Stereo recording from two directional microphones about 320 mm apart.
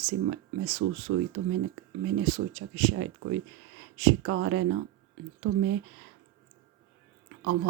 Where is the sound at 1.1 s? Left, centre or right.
Right.